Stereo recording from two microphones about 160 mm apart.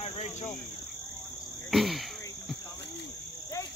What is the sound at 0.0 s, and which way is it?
Cricket, 45° left (ahead or behind).